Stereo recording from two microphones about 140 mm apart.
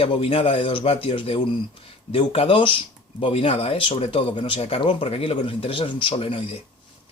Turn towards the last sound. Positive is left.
turn(degrees=40)  # may be behind; listen again after turning